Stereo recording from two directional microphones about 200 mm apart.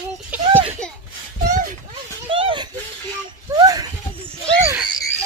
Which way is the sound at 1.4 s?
40° right (ahead or behind).